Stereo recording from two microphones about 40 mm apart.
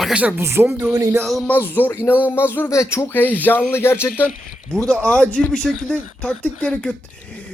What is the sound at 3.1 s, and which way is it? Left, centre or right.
Speech, left.